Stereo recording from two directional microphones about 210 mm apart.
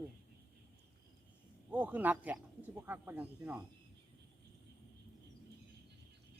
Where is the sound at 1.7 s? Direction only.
5° right (ahead or behind).